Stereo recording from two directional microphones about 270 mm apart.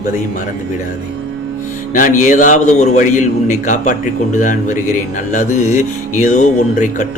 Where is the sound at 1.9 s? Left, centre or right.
Left.